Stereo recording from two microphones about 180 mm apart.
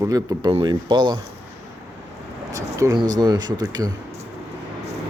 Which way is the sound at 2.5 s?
20° right (ahead or behind).